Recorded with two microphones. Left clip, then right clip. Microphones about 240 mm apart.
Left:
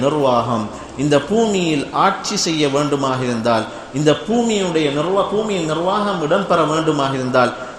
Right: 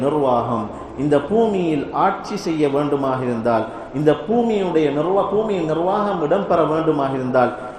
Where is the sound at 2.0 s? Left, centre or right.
Left.